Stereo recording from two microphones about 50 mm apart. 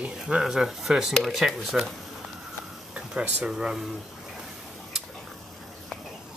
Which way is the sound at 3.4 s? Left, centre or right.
Centre.